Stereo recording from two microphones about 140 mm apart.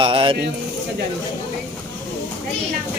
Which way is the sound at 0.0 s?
40° right (ahead or behind).